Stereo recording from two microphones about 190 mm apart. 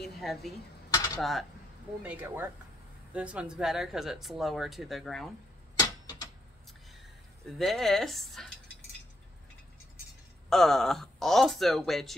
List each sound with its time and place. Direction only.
0.0 s a sound: centre (ahead or behind)
0.8 s dishes: 20° left (ahead or behind)
2.0 s speech: 10° right (ahead or behind)
5.8 s tick-tock: 20° left (ahead or behind)
7.4 s speech: centre (ahead or behind)
10.5 s speech: centre (ahead or behind)